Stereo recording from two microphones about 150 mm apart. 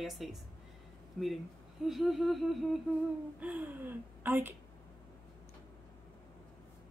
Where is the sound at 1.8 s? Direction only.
Centre (ahead or behind).